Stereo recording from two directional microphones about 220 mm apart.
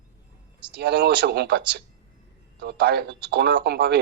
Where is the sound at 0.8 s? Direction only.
50° right (ahead or behind).